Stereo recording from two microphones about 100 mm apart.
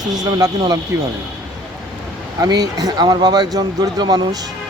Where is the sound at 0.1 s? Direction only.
40° right (ahead or behind).